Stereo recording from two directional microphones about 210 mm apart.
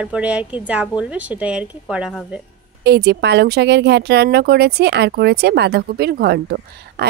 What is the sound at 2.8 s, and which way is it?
Speech, 50° right (ahead or behind).